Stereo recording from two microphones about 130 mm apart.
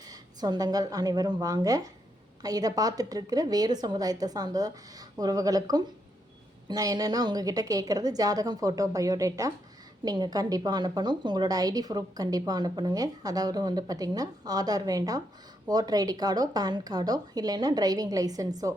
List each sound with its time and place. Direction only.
0.1 s a woman's voice: 30° right (ahead or behind)